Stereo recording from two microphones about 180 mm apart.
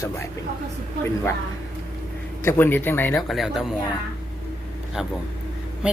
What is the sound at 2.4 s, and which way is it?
Speech, 10° left (ahead or behind).